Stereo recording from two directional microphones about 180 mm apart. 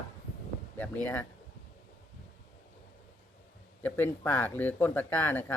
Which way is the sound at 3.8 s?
10° left (ahead or behind).